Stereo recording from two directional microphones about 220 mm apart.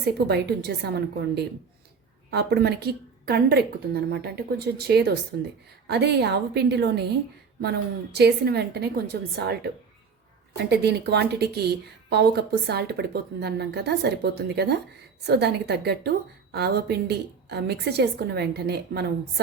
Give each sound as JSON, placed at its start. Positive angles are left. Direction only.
{"t": 0.3, "sound": "a woman's voice", "side_deg": -50}
{"t": 10.6, "sound": "a woman's voice", "side_deg": -50}